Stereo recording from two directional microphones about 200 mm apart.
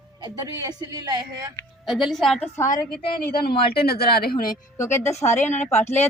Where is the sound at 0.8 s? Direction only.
20° right (ahead or behind).